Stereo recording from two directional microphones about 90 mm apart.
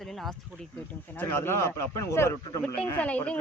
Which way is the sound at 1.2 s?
30° left (ahead or behind).